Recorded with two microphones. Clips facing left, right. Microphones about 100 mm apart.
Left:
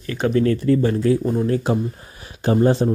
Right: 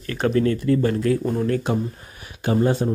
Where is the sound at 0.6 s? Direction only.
30° left (ahead or behind).